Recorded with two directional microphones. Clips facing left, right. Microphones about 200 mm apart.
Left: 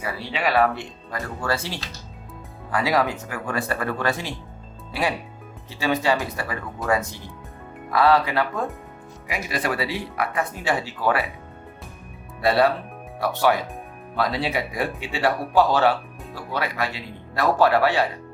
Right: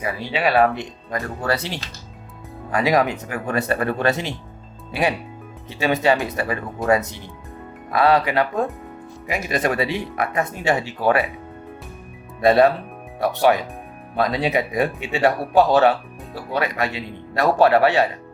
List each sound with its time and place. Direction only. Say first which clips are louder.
0.0 s speech: right 4 dB; 15° right (ahead or behind)
12.4 s speech: right 5 dB; 20° right (ahead or behind)